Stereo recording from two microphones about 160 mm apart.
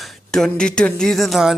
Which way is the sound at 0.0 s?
Centre (ahead or behind).